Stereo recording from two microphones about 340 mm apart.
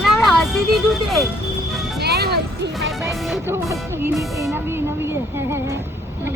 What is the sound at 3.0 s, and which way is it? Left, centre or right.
Music, centre.